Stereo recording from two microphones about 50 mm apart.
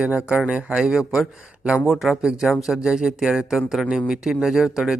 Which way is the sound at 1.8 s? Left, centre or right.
Centre.